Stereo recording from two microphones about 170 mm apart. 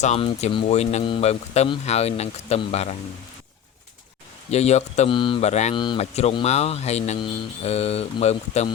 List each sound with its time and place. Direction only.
0.0 s speech: 40° left (ahead or behind)
4.5 s speech: 40° left (ahead or behind)
5.7 s speech: 25° left (ahead or behind)
6.0 s speech: 40° left (ahead or behind)